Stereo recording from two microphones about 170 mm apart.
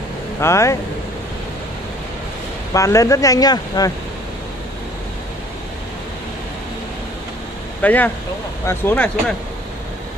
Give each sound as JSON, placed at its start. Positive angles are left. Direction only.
{"t": 0.4, "sound": "speech", "side_deg": 15}
{"t": 2.7, "sound": "speech", "side_deg": 20}
{"t": 7.8, "sound": "speech", "side_deg": 10}